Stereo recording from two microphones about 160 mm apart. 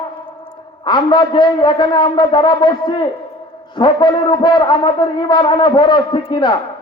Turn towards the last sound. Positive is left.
turn(degrees=30)  # may be behind; listen again after turning